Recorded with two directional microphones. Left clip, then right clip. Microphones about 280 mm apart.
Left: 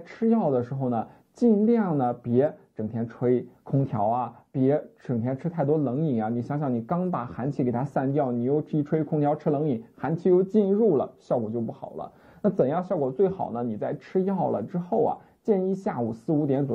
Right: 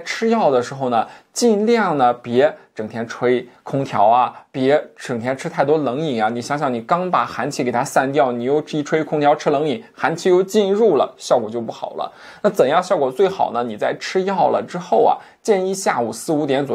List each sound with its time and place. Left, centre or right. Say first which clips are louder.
0.0 s speech: right 9 dB; centre
11.4 s speech: right 7 dB; right
12.0 s speech: right 9 dB; centre
16.4 s speech: right 7 dB; centre